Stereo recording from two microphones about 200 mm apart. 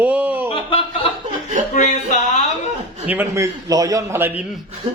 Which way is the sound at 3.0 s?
10° right (ahead or behind).